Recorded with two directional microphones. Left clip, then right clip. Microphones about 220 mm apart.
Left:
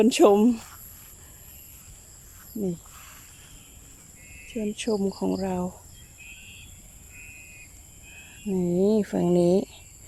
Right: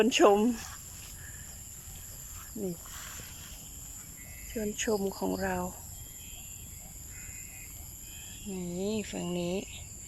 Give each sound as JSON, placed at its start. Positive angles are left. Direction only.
{"t": 0.0, "sound": "speech", "side_deg": 15}
{"t": 4.5, "sound": "speech", "side_deg": 10}
{"t": 8.5, "sound": "speech", "side_deg": 35}